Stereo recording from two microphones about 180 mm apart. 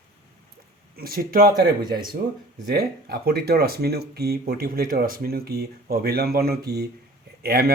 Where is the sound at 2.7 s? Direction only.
60° right (ahead or behind).